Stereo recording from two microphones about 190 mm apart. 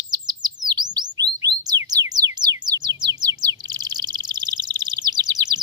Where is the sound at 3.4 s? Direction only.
20° right (ahead or behind).